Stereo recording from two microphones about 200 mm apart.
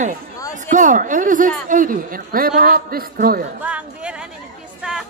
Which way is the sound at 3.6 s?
5° right (ahead or behind).